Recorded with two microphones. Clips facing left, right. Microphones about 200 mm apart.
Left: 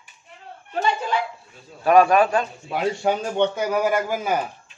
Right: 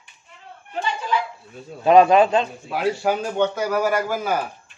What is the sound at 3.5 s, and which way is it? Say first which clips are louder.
Speech: even; 15° left (ahead or behind).